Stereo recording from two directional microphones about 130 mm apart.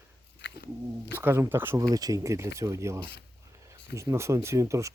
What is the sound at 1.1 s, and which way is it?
Speech, 20° right (ahead or behind).